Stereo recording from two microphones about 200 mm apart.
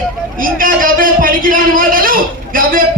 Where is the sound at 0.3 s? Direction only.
45° right (ahead or behind).